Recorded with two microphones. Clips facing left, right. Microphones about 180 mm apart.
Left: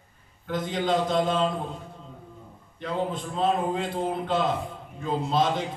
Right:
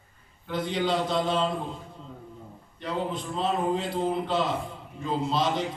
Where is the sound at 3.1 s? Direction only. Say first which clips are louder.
Left 2 dB; 50° left (ahead or behind).